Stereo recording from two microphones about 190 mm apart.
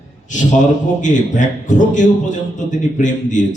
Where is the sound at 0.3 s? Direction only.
40° left (ahead or behind).